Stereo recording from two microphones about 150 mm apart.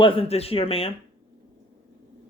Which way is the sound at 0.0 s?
40° left (ahead or behind).